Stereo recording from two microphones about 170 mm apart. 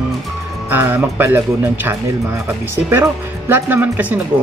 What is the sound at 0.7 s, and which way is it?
Speech, 10° right (ahead or behind).